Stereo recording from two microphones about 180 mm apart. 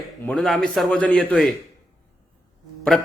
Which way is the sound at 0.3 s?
Centre (ahead or behind).